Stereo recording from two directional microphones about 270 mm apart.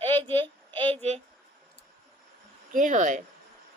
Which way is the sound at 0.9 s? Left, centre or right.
Right.